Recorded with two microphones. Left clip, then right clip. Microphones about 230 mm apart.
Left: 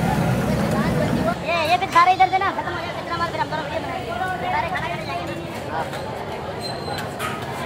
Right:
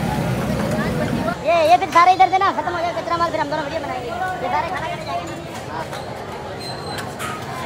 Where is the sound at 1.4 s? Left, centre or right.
Right.